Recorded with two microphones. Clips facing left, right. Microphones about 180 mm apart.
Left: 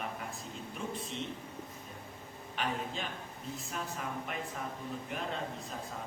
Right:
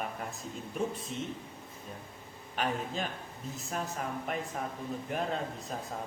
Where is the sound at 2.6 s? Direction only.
45° right (ahead or behind).